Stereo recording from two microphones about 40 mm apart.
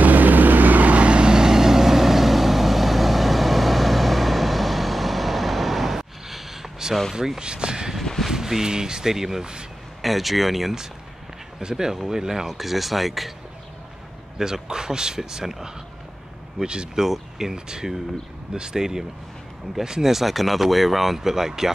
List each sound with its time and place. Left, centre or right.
0.0 s vehicle: right; by 7.0 s centre
7.2 s speech: centre
8.0 s speech: centre
8.3 s speech: centre
10.0 s speech: centre
14.4 s speech: centre
17.0 s speech: centre